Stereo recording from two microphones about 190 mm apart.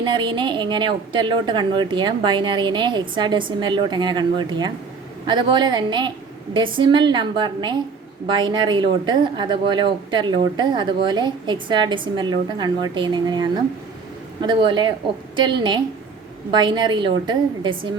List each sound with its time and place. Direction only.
0.0 s a woman's voice: 25° right (ahead or behind)